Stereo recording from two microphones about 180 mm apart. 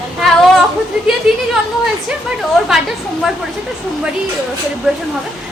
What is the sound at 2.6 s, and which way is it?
Speech, centre (ahead or behind).